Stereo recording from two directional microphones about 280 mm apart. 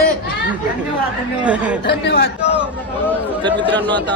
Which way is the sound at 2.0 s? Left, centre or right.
Left.